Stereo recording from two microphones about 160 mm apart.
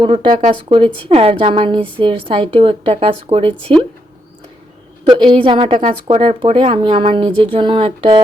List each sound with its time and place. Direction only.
0.0 s a woman's voice: 30° right (ahead or behind)
5.0 s a woman's voice: 30° right (ahead or behind)